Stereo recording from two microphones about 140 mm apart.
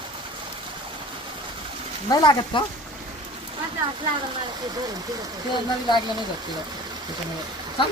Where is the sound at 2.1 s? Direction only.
30° left (ahead or behind).